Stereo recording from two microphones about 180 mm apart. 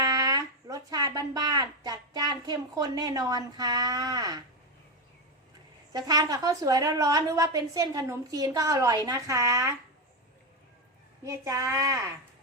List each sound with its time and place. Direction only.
0.0 s speech: 20° right (ahead or behind)
5.9 s a woman's voice: 20° right (ahead or behind)
11.3 s speech: 15° right (ahead or behind)